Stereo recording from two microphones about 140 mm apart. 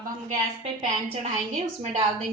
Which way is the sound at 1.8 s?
50° right (ahead or behind).